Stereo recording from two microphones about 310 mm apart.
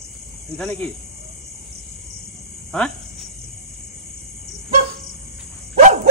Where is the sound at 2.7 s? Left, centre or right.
Centre.